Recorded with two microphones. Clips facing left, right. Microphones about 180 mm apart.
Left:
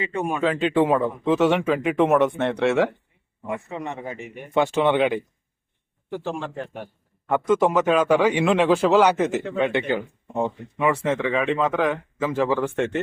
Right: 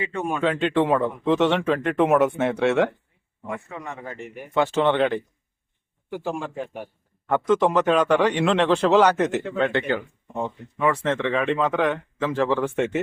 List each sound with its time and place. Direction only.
0.1 s speech: 15° left (ahead or behind)
0.3 s speech: centre (ahead or behind)
3.5 s a man's voice: 20° left (ahead or behind)
6.1 s a man's voice: 10° right (ahead or behind)
7.3 s speech: 10° left (ahead or behind)
9.6 s speech: 15° left (ahead or behind); by 13.0 s centre (ahead or behind)